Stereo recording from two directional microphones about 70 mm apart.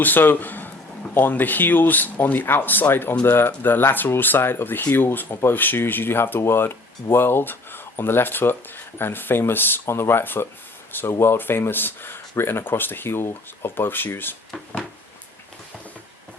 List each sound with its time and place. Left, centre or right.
0.0 s speech: left